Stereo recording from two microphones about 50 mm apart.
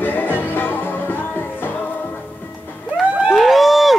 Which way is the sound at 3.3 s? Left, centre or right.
Centre.